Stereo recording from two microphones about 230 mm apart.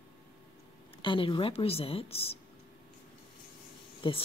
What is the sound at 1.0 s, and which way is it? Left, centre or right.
Speech, left.